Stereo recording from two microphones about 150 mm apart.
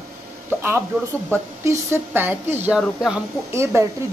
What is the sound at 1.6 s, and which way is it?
A woman's voice, 20° right (ahead or behind).